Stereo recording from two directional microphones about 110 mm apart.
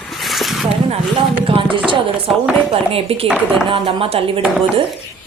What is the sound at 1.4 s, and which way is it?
Speech, 60° right (ahead or behind).